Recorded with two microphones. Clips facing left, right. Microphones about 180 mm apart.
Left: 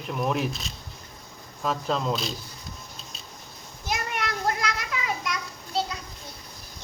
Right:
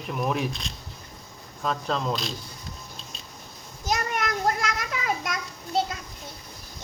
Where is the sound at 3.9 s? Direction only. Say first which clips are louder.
Right 3 dB; 45° right (ahead or behind).